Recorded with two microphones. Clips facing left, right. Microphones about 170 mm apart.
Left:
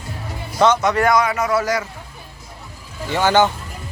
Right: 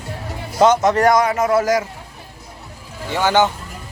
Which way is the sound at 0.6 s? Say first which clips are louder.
Right 2 dB; 40° right (ahead or behind).